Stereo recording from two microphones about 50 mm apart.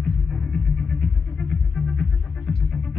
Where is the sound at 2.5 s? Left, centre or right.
Centre.